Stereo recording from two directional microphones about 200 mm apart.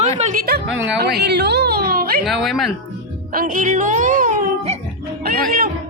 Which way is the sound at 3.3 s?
40° right (ahead or behind).